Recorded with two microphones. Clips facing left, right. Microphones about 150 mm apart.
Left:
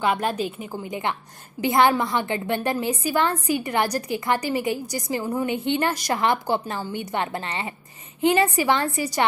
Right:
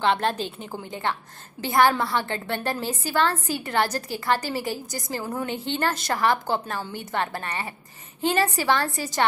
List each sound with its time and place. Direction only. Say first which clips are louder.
0.0 s a woman's voice: even; 10° left (ahead or behind)
4.8 s a woman's voice: left 4 dB; 45° right (ahead or behind)
5.1 s a woman's voice: left 4 dB; 10° left (ahead or behind)